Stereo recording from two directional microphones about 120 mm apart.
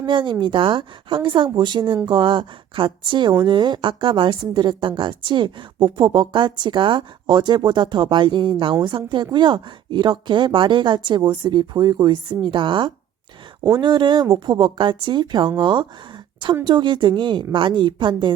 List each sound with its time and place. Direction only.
0.0 s a woman's voice: 40° right (ahead or behind)